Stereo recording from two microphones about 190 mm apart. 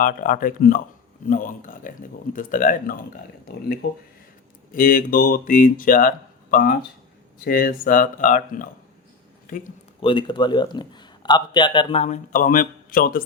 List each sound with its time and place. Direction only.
0.0 s speech: 45° left (ahead or behind)
3.8 s speech: 60° left (ahead or behind)
4.7 s speech: 45° left (ahead or behind)
10.0 s a man's voice: 25° left (ahead or behind); by 13.2 s 50° left (ahead or behind)